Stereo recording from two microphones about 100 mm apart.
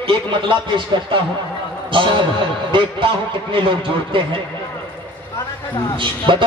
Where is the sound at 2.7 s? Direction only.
55° right (ahead or behind).